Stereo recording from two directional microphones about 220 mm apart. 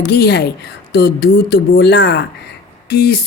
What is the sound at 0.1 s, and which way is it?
Speech, 50° left (ahead or behind).